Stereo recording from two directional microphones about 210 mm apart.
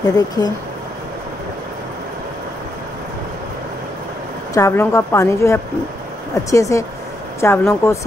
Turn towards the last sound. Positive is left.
turn(degrees=10)  # may be behind; listen again after turning